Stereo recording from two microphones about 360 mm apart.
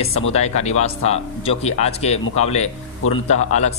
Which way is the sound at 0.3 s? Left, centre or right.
Centre.